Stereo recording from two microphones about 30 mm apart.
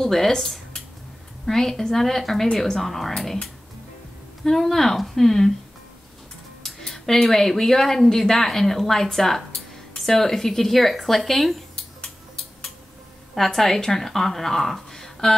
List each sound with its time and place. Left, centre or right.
0.0 s speech: centre
4.5 s speech: centre
6.9 s speech: centre
13.5 s speech: centre